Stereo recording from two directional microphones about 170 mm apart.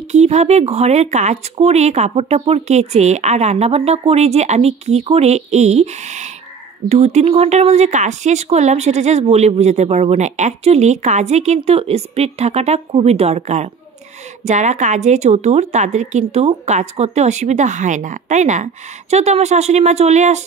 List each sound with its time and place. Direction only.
0.1 s a woman's voice: 40° right (ahead or behind)